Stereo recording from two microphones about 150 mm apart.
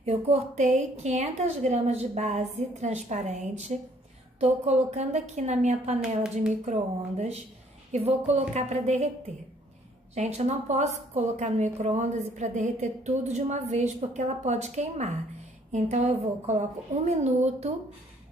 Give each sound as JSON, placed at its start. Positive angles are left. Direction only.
{"t": 0.0, "sound": "a woman's voice", "side_deg": -50}
{"t": 10.1, "sound": "a woman's voice", "side_deg": -45}